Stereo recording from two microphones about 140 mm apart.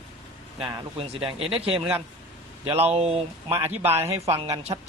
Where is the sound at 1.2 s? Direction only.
40° right (ahead or behind).